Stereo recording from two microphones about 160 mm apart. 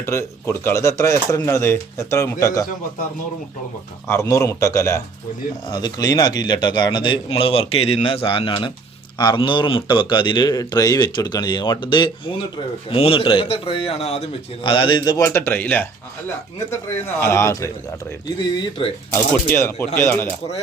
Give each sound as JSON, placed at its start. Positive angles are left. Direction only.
{"t": 0.0, "sound": "a man's voice", "side_deg": 15}
{"t": 4.1, "sound": "a man's voice", "side_deg": 20}
{"t": 15.2, "sound": "speech", "side_deg": 15}
{"t": 17.2, "sound": "speech", "side_deg": 15}
{"t": 18.3, "sound": "a man's voice", "side_deg": 25}
{"t": 19.1, "sound": "speech", "side_deg": 15}